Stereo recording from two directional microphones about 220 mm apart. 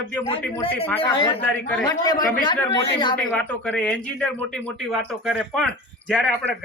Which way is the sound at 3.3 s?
5° left (ahead or behind).